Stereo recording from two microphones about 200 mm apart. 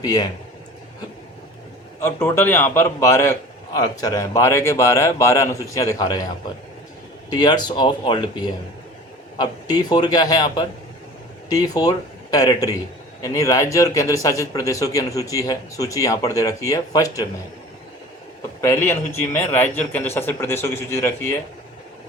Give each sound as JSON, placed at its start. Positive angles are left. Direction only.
{"t": 0.0, "sound": "a man's voice", "side_deg": 20}
{"t": 2.0, "sound": "a man's voice", "side_deg": 10}
{"t": 7.3, "sound": "a man's voice", "side_deg": 20}
{"t": 18.6, "sound": "a man's voice", "side_deg": 10}